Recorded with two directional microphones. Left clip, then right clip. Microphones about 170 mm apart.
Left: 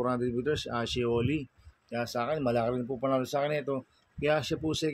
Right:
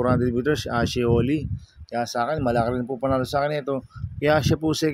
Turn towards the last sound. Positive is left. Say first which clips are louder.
# right 8 dB
turn(degrees=-50)  # may be behind; listen again after turning